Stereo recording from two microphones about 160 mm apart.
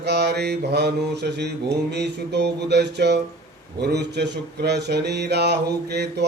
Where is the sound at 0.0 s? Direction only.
90° right.